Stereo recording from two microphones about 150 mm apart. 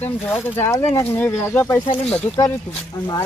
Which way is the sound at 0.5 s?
20° left (ahead or behind).